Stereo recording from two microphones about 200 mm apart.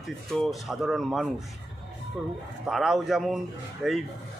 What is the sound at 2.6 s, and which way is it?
Speech, 5° right (ahead or behind).